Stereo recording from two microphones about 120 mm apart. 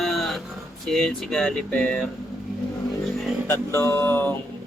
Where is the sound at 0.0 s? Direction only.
Centre (ahead or behind).